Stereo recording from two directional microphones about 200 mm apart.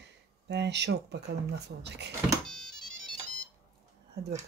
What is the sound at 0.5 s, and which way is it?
Speech, 60° right (ahead or behind).